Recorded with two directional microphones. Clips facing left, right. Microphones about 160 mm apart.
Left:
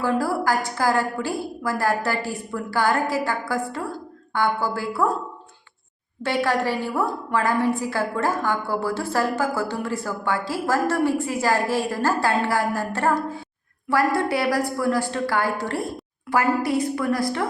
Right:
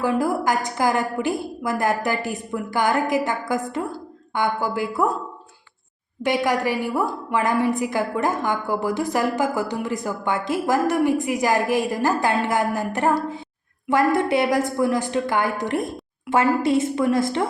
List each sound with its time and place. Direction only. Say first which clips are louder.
0.0 s a woman's voice: right 1 dB; 15° right (ahead or behind)
6.2 s a woman's voice: right 1 dB; 15° right (ahead or behind)